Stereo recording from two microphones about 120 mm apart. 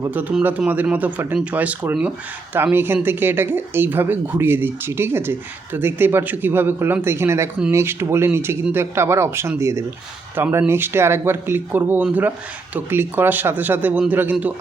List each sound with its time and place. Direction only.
0.0 s speech: 15° right (ahead or behind)